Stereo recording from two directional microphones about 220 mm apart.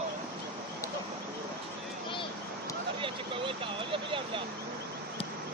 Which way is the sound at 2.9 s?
25° right (ahead or behind).